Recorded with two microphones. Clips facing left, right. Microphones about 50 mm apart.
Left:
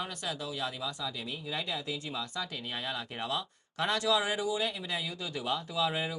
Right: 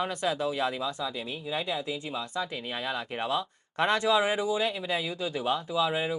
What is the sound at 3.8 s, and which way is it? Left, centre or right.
Speech, right.